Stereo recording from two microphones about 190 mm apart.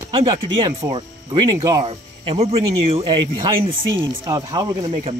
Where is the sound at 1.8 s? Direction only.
30° right (ahead or behind).